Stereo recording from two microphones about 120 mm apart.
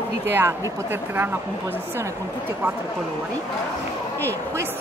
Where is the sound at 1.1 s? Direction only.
20° right (ahead or behind).